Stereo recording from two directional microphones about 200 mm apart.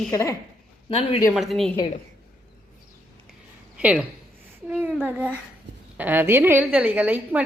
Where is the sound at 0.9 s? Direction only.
30° left (ahead or behind).